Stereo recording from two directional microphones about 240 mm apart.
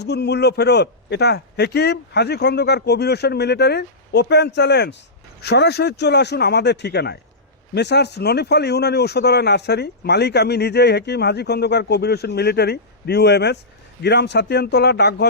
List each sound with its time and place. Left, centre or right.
0.0 s speech: left